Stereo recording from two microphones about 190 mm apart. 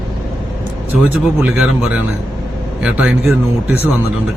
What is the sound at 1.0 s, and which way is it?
Speech, 5° right (ahead or behind).